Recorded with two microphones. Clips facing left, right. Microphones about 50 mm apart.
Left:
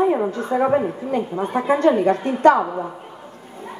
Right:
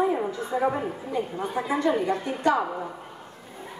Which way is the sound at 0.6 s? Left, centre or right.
Left.